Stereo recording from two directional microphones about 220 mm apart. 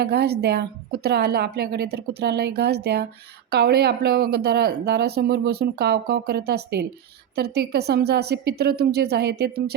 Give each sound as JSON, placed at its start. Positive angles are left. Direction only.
{"t": 0.0, "sound": "speech", "side_deg": -45}